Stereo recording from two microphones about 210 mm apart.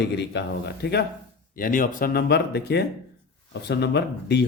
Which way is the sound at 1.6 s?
40° left (ahead or behind).